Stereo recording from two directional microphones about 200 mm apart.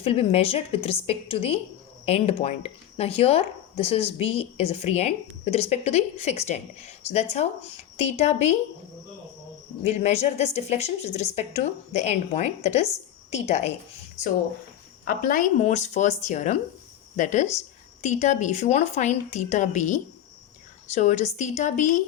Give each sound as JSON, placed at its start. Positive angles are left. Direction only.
{"t": 0.0, "sound": "a woman's voice", "side_deg": 30}
{"t": 9.8, "sound": "speech", "side_deg": 35}
{"t": 15.0, "sound": "speech", "side_deg": 45}